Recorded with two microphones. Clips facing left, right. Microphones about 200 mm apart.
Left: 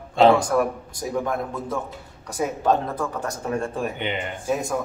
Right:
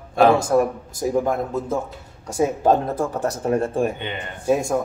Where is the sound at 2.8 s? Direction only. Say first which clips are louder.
Right 4 dB; 25° right (ahead or behind).